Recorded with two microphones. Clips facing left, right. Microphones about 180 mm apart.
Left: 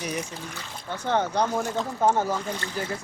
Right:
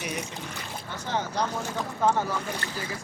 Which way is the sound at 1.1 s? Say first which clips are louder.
Left 6 dB; 55° left (ahead or behind).